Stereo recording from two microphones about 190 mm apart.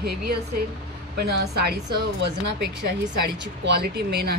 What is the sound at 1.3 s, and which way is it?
Speech, 55° right (ahead or behind).